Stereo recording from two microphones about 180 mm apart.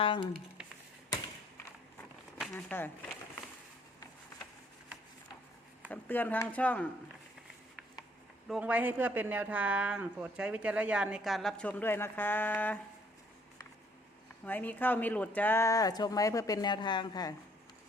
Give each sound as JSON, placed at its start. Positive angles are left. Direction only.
{"t": 0.0, "sound": "speech", "side_deg": 25}
{"t": 2.4, "sound": "speech", "side_deg": 5}
{"t": 5.9, "sound": "speech", "side_deg": 10}
{"t": 8.4, "sound": "speech", "side_deg": -5}
{"t": 14.4, "sound": "speech", "side_deg": 10}